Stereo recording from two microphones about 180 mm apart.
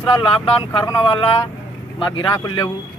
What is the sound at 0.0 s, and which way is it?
Speech, 30° left (ahead or behind).